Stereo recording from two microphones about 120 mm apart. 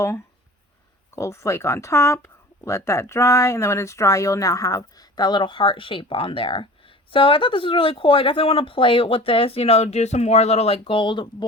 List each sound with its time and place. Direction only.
1.1 s speech: 25° left (ahead or behind); by 11.4 s 40° left (ahead or behind)